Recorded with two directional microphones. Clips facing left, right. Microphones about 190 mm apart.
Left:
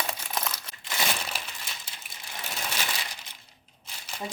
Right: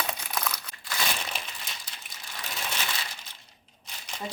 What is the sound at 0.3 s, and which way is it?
Crumpling, 25° left (ahead or behind).